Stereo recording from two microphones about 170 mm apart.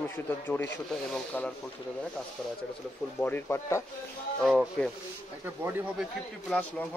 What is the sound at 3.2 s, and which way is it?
Speech, 10° left (ahead or behind).